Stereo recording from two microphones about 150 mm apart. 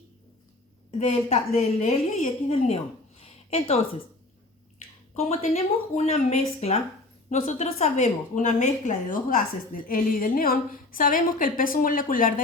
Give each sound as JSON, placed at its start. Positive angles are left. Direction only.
{"t": 0.9, "sound": "a woman's voice", "side_deg": 40}
{"t": 5.3, "sound": "a woman's voice", "side_deg": 45}